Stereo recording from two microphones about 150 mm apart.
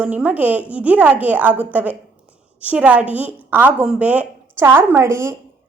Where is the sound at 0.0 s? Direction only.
10° right (ahead or behind).